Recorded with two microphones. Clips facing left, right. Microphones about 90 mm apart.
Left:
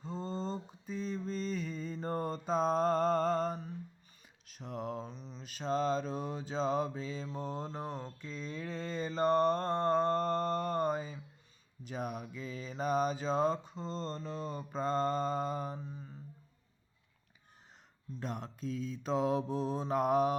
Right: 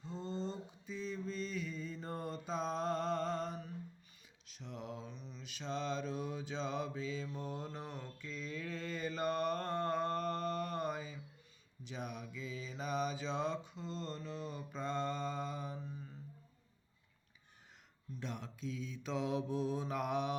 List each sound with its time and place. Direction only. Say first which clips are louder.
0.0 s mantra: left 3 dB; 40° left (ahead or behind)
18.2 s mantra: left 4 dB; 40° left (ahead or behind)